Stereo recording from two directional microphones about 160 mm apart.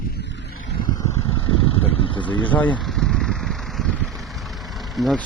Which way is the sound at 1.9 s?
35° left (ahead or behind).